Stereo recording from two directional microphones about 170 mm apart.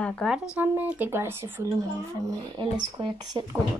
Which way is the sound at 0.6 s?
10° right (ahead or behind).